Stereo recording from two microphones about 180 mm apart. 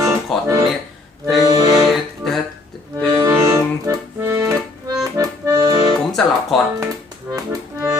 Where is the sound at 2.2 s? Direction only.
Centre (ahead or behind).